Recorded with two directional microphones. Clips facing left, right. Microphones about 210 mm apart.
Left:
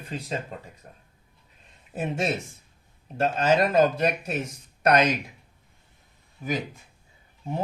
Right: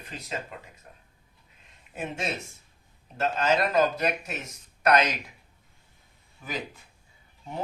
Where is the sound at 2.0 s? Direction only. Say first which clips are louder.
Left 5 dB; 35° left (ahead or behind).